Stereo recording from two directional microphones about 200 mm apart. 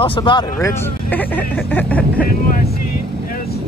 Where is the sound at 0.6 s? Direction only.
15° left (ahead or behind).